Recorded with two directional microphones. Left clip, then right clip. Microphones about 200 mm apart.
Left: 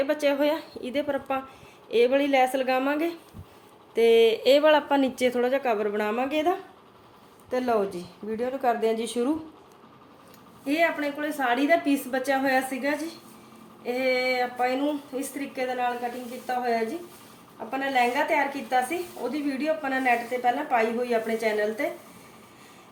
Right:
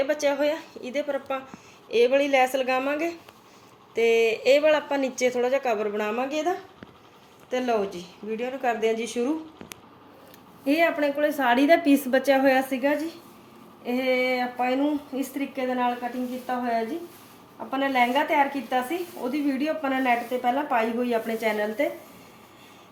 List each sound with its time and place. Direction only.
0.0 s speech: 5° left (ahead or behind)
7.5 s speech: 5° left (ahead or behind)
10.7 s a woman's voice: 25° right (ahead or behind); by 15.9 s 10° right (ahead or behind)
17.7 s speech: 10° right (ahead or behind)